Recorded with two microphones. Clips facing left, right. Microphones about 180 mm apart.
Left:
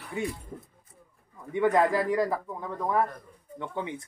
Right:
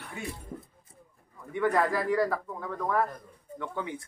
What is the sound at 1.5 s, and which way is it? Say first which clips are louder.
Speech: left 3 dB; 20° left (ahead or behind).